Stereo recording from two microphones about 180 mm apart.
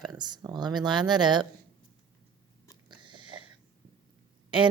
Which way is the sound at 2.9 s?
25° right (ahead or behind).